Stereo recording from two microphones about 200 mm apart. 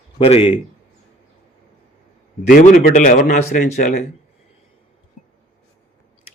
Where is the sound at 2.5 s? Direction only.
50° left (ahead or behind).